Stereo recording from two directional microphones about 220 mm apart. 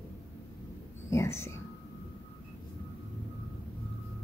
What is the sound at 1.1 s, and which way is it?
Speech, 10° left (ahead or behind).